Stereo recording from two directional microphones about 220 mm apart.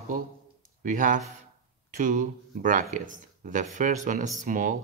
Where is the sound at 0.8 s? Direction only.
35° right (ahead or behind).